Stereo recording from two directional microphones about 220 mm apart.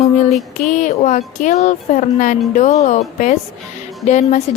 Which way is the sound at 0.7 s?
35° left (ahead or behind).